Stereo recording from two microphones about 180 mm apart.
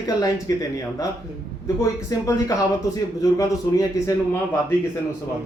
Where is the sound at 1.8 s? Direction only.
15° left (ahead or behind).